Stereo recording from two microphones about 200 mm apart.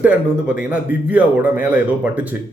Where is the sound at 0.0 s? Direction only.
5° right (ahead or behind).